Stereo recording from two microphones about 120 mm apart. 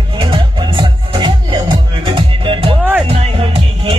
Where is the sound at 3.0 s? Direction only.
60° right (ahead or behind).